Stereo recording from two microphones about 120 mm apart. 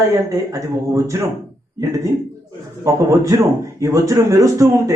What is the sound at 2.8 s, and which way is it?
Speech, 25° right (ahead or behind).